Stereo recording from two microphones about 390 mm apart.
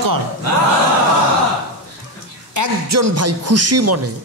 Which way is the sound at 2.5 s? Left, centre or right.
Right.